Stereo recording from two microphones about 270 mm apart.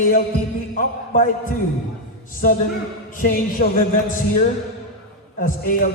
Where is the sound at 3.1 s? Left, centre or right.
Left.